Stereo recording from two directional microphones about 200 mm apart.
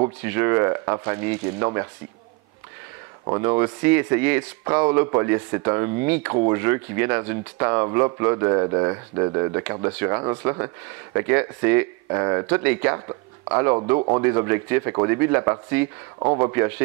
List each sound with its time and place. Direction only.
0.2 s speech: 15° right (ahead or behind)
3.3 s speech: 20° right (ahead or behind)
16.2 s speech: 25° right (ahead or behind)